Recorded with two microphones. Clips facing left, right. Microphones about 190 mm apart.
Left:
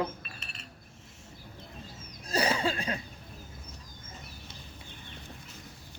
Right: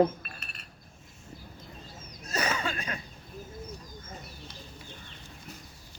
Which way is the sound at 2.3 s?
30° left (ahead or behind).